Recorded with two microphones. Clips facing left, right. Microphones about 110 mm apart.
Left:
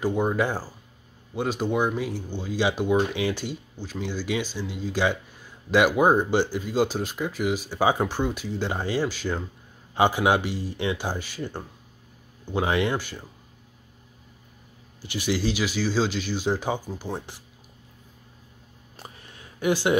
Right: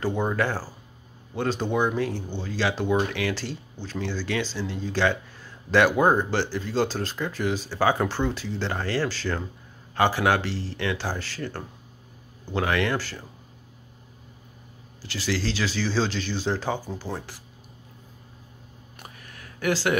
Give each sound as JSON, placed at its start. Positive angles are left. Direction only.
{"t": 0.0, "sound": "speech", "side_deg": 10}
{"t": 15.0, "sound": "speech", "side_deg": 20}
{"t": 18.9, "sound": "a sound", "side_deg": 30}